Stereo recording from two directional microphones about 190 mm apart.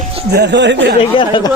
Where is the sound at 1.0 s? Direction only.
25° left (ahead or behind).